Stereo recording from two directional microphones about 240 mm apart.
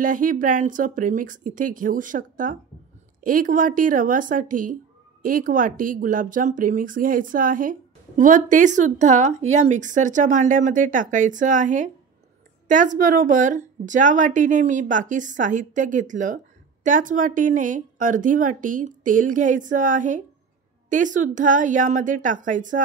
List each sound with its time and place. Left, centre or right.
0.0 s speech: right